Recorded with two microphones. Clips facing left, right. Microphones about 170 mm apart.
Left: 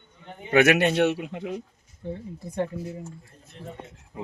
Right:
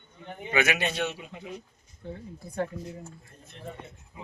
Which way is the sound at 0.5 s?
65° left (ahead or behind).